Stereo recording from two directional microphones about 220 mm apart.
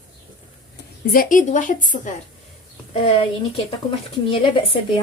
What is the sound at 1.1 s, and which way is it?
Speech, 40° left (ahead or behind).